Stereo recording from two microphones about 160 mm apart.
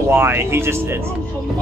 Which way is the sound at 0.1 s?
15° right (ahead or behind).